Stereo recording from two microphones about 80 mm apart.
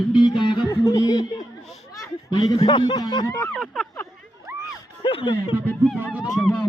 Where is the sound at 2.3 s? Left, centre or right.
Left.